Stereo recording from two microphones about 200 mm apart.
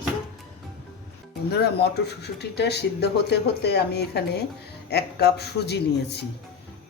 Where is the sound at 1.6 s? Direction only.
55° left (ahead or behind).